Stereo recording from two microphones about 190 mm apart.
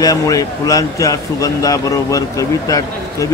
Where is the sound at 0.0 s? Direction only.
20° left (ahead or behind).